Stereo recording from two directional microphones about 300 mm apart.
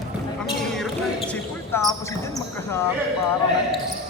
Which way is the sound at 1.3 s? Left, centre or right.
Centre.